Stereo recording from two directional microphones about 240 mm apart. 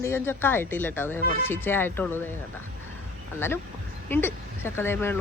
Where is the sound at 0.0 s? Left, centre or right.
Centre.